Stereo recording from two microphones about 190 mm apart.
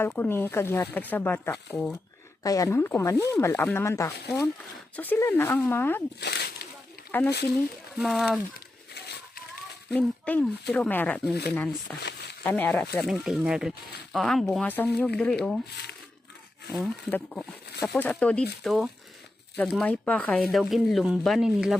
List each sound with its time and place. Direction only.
0.0 s speech: 10° left (ahead or behind)
6.1 s a sound: 60° left (ahead or behind)
7.9 s speech: centre (ahead or behind)
8.5 s a sound: 55° left (ahead or behind)
9.9 s speech: 10° left (ahead or behind)
16.7 s speech: centre (ahead or behind)